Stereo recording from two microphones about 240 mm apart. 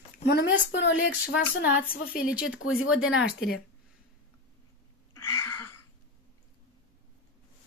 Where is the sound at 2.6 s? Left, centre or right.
Left.